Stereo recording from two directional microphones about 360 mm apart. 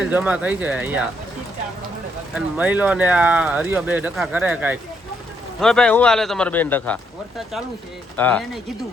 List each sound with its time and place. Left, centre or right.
0.0 s speech: centre
2.3 s speech: centre